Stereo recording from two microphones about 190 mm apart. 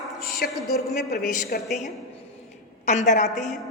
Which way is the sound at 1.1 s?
55° left (ahead or behind).